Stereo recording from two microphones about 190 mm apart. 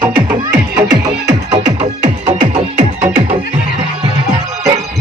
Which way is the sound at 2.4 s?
40° right (ahead or behind).